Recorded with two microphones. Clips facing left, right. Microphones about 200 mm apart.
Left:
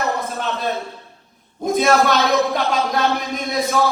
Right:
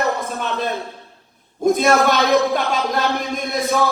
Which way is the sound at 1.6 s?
55° right (ahead or behind).